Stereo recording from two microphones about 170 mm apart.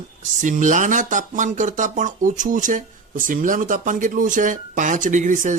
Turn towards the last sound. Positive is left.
turn(degrees=-50)  # may be behind; listen again after turning